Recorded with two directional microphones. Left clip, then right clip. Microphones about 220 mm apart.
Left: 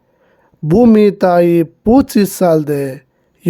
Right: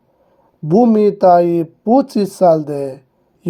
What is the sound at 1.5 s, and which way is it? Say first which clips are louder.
Speech: left 4 dB; 35° left (ahead or behind).